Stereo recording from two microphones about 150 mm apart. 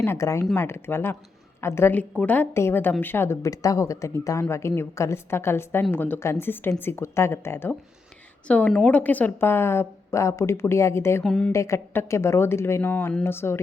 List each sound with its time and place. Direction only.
0.0 s a woman's voice: 20° left (ahead or behind)
11.2 s a woman's voice: 5° left (ahead or behind)
11.5 s a woman's voice: 20° left (ahead or behind)